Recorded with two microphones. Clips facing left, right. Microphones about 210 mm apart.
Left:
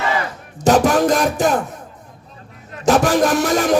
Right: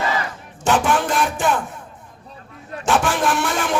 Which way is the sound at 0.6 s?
40° left (ahead or behind).